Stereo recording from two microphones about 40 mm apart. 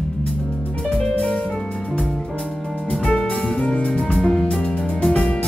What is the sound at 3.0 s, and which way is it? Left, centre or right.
Music, centre.